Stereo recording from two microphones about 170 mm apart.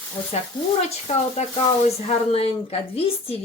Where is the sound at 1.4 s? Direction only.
40° left (ahead or behind).